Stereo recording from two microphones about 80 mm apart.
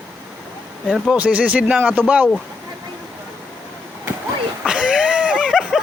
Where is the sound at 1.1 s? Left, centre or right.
Centre.